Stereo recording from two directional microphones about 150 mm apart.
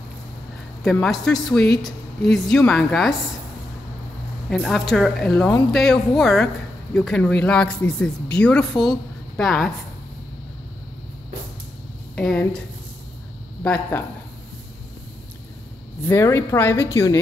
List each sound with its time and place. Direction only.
1.0 s speech: 5° left (ahead or behind)
4.5 s speech: centre (ahead or behind)
12.2 s speech: 5° left (ahead or behind)
16.1 s a woman's voice: 15° left (ahead or behind)